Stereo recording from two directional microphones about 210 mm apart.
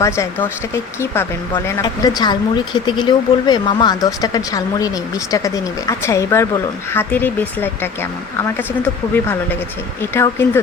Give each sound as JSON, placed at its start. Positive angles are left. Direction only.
{"t": 0.0, "sound": "speech", "side_deg": 15}
{"t": 10.0, "sound": "speech", "side_deg": 10}